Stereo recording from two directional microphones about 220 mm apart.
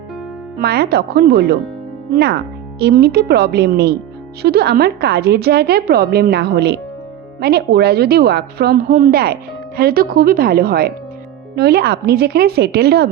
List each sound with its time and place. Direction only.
0.6 s a woman's voice: 45° right (ahead or behind)
2.7 s a woman's voice: 45° right (ahead or behind)